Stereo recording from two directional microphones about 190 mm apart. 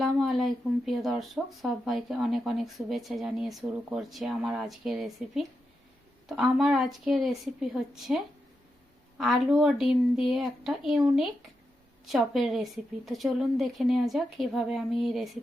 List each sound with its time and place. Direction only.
0.0 s speech: centre (ahead or behind)